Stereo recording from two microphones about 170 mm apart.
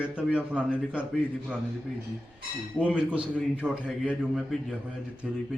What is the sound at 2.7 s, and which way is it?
Speech, 5° right (ahead or behind).